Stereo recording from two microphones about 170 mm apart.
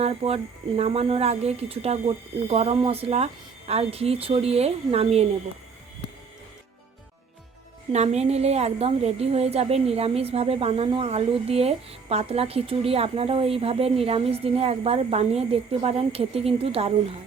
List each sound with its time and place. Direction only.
0.0 s a woman's voice: 35° right (ahead or behind)
7.9 s a woman's voice: 40° right (ahead or behind)